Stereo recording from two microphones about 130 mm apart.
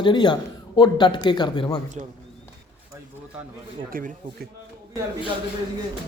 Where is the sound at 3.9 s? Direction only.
90° right.